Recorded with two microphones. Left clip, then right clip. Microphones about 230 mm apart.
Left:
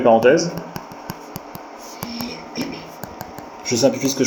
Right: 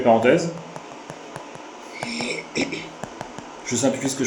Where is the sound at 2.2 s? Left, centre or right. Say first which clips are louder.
Right 3 dB; right.